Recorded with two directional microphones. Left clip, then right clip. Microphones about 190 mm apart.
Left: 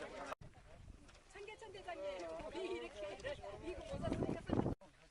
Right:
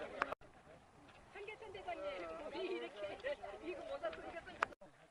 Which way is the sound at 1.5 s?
35° left (ahead or behind).